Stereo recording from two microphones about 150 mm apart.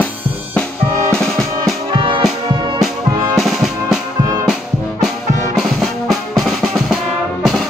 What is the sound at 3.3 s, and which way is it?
Music, centre (ahead or behind).